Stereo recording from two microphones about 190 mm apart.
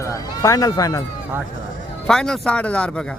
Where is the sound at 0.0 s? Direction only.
15° left (ahead or behind).